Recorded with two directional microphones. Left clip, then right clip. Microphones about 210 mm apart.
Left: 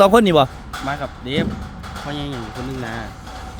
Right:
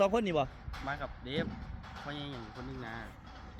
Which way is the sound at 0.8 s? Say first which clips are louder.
Left 13 dB; 5° left (ahead or behind).